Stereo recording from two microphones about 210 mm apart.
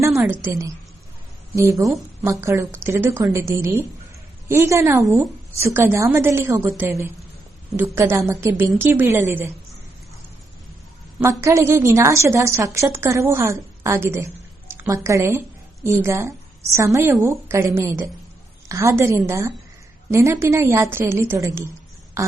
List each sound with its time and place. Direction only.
0.2 s a woman's voice: 15° right (ahead or behind)
4.4 s a woman's voice: 10° right (ahead or behind)
11.2 s a woman's voice: 15° right (ahead or behind)